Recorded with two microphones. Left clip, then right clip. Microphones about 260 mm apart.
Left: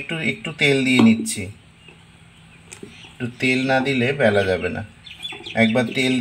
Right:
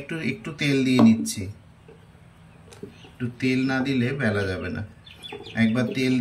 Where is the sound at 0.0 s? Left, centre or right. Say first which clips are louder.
Left 6 dB; centre.